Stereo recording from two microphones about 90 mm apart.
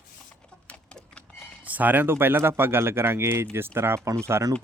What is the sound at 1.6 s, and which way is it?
Speech, 20° right (ahead or behind).